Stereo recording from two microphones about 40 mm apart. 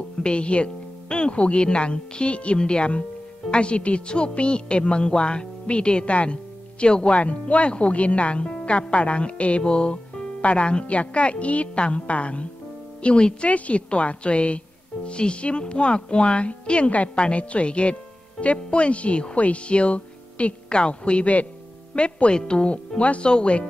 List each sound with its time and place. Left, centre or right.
0.2 s a woman's voice: left